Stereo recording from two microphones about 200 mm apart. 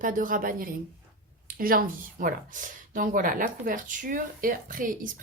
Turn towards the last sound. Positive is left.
turn(degrees=-45)  # may be behind; listen again after turning